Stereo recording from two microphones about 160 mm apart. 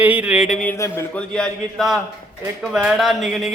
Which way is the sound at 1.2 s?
5° left (ahead or behind).